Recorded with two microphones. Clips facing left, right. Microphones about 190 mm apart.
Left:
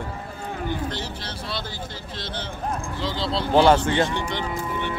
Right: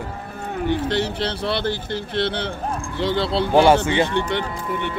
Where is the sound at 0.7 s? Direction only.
80° right; by 3.4 s 65° right (ahead or behind).